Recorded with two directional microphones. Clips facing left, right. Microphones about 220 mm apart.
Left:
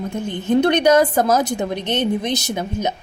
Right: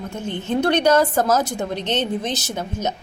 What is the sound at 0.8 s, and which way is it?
A woman's voice, 15° left (ahead or behind).